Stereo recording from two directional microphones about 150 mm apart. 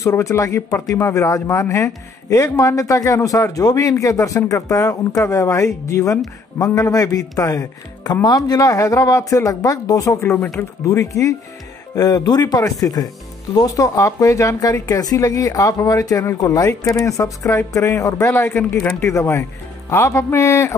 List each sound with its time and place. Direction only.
0.0 s speech: 20° left (ahead or behind)